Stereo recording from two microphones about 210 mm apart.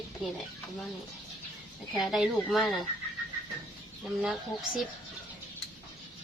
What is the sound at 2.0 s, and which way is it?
Speech, centre (ahead or behind).